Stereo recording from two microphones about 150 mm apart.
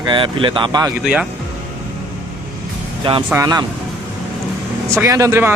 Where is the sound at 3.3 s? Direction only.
25° right (ahead or behind).